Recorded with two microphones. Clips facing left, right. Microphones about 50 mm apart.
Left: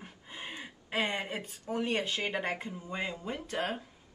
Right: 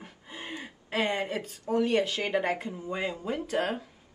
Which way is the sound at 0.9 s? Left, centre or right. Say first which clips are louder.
Right 4 dB; left.